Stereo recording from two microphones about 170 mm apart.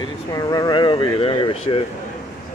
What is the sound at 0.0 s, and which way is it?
Speech, 20° left (ahead or behind).